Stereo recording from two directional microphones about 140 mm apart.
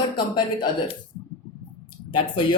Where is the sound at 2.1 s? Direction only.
35° left (ahead or behind).